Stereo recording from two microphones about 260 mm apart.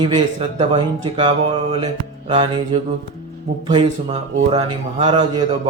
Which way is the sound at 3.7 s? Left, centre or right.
Centre.